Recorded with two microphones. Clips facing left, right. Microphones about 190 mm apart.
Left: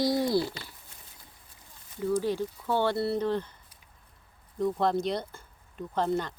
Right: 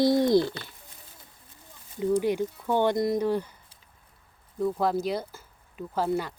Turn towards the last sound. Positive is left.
turn(degrees=-10)  # may be behind; listen again after turning